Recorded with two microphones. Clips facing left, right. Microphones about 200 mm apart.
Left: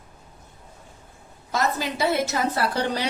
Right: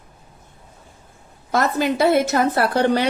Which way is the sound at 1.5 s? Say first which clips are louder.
Right 6 dB; 60° right (ahead or behind).